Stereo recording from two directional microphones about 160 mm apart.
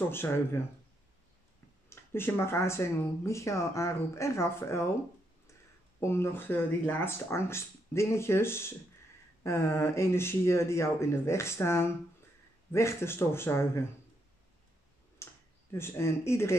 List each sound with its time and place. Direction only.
0.1 s speech: 15° left (ahead or behind)
1.9 s speech: 15° left (ahead or behind)
5.9 s speech: 15° left (ahead or behind)
15.2 s a sound: 15° left (ahead or behind)
15.7 s speech: 15° left (ahead or behind)